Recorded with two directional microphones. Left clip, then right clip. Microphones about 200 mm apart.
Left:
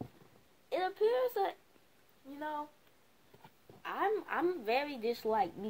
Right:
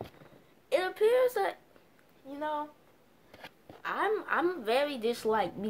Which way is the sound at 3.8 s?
30° left (ahead or behind).